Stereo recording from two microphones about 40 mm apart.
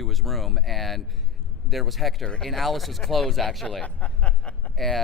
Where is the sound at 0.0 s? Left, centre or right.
Centre.